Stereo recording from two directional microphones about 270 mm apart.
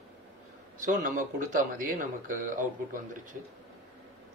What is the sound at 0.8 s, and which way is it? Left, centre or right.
A man's voice, right.